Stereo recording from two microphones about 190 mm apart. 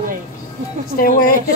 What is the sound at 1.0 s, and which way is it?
Speech, 50° left (ahead or behind).